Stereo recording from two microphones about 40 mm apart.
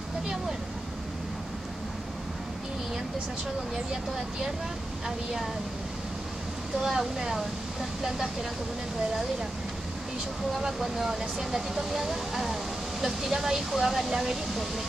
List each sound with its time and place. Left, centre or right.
3.9 s speech: centre
6.8 s speech: centre
10.8 s speech: centre